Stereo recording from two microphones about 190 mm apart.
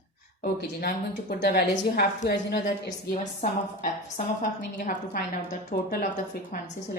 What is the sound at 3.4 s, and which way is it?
A woman's voice, 40° left (ahead or behind).